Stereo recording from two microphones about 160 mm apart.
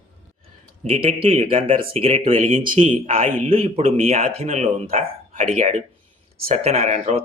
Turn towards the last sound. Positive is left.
turn(degrees=-45)  # may be behind; listen again after turning